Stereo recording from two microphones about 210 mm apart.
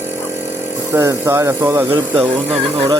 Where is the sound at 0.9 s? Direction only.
15° right (ahead or behind).